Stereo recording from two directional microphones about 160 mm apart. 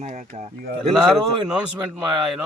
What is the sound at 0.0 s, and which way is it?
Speech, 45° right (ahead or behind).